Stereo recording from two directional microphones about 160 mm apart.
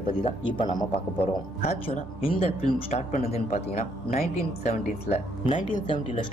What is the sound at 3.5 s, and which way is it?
Speech, 60° left (ahead or behind).